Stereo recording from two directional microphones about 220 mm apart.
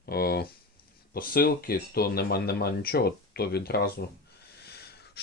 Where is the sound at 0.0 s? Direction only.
45° left (ahead or behind).